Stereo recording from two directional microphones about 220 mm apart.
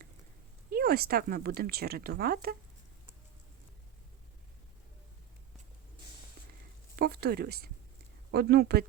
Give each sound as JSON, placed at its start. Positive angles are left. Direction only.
{"t": 0.7, "sound": "speech", "side_deg": -45}
{"t": 6.9, "sound": "speech", "side_deg": -45}